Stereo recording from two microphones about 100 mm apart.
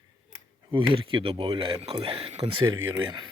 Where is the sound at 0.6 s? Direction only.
60° right (ahead or behind).